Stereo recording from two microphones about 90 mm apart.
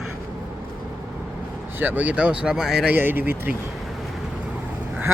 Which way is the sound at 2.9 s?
20° right (ahead or behind).